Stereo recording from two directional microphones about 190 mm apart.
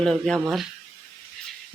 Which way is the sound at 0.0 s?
5° left (ahead or behind).